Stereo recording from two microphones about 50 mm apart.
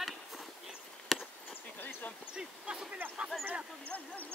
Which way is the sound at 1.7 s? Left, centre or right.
Left.